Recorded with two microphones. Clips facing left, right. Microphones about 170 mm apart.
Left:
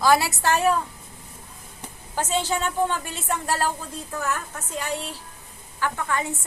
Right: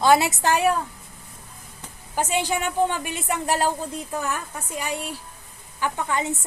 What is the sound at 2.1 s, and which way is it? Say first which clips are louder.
A woman's voice: right 1 dB; 15° right (ahead or behind).